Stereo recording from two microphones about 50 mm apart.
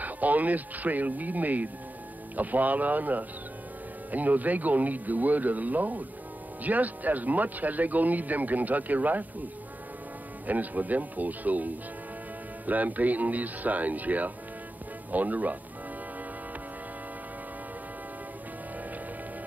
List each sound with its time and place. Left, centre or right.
0.0 s speech: right
10.4 s speech: right